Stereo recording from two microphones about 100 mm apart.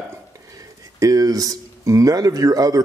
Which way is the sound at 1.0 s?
35° right (ahead or behind).